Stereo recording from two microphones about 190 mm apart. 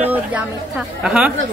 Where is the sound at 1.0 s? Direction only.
5° right (ahead or behind).